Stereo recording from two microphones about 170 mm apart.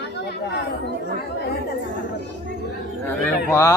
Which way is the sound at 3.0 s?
15° left (ahead or behind).